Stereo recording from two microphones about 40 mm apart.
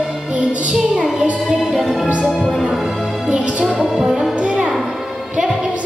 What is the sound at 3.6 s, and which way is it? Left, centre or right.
Brass instrument, centre.